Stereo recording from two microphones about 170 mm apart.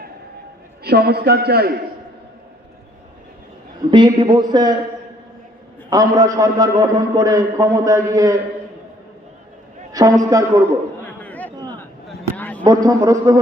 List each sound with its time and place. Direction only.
0.9 s a man's voice: 70° right (ahead or behind)
3.9 s a man's voice: 25° right (ahead or behind)
5.9 s a man's voice: 20° right (ahead or behind)
9.9 s a man's voice: 20° right (ahead or behind)
11.0 s a sound: 10° left (ahead or behind)
12.6 s a man's voice: 20° right (ahead or behind)